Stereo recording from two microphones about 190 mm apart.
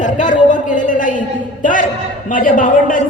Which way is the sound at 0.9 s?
45° left (ahead or behind).